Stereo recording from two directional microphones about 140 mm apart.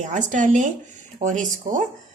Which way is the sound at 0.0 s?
60° right (ahead or behind).